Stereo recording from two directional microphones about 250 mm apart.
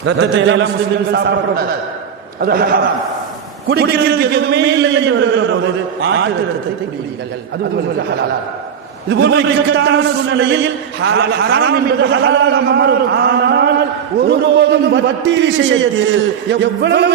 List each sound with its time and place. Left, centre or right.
0.0 s a man's voice: right
2.4 s a man's voice: right
9.0 s a man's voice: right